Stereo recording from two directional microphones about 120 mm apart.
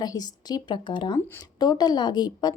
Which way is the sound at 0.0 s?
35° left (ahead or behind).